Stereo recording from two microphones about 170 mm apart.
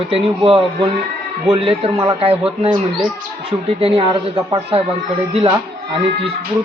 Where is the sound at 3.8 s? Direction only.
30° right (ahead or behind).